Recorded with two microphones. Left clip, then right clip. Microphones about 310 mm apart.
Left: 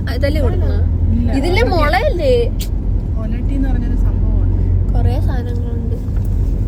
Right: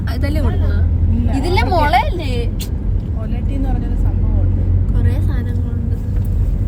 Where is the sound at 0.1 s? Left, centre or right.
Centre.